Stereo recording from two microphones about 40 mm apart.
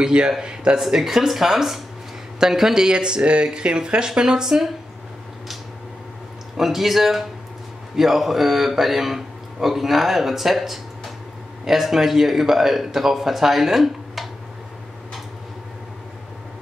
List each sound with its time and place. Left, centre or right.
0.0 s speech: right
0.7 s a man's voice: centre
6.5 s a man's voice: centre